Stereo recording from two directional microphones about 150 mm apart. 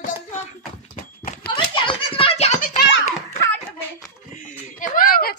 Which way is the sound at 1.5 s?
35° left (ahead or behind).